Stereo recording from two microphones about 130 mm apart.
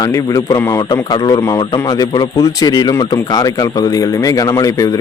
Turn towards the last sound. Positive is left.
turn(degrees=25)  # may be behind; listen again after turning